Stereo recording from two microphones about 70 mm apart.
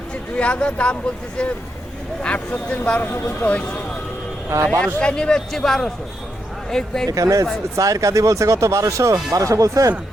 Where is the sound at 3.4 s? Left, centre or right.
Left.